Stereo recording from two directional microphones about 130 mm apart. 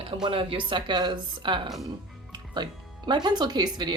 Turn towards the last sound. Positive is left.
turn(degrees=-30)  # may be behind; listen again after turning